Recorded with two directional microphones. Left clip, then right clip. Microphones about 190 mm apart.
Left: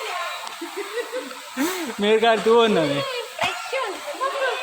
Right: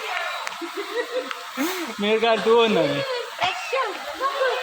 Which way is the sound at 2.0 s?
35° left (ahead or behind).